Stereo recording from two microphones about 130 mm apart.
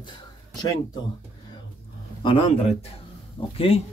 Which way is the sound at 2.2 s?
40° left (ahead or behind).